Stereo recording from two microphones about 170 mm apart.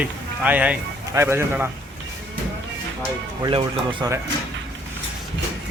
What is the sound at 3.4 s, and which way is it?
Speech, 30° right (ahead or behind).